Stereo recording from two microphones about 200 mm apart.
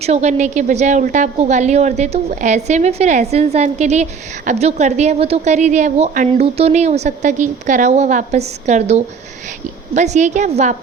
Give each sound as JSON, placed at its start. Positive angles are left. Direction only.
{"t": 0.0, "sound": "a woman's voice", "side_deg": -35}